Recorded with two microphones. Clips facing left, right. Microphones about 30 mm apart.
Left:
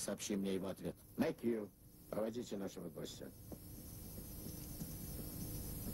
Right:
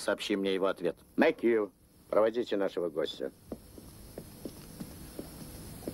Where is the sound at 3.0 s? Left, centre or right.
Right.